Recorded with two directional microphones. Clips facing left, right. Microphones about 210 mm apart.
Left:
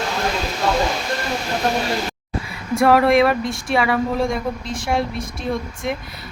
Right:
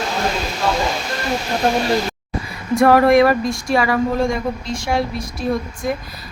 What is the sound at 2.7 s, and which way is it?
A woman's voice, centre (ahead or behind).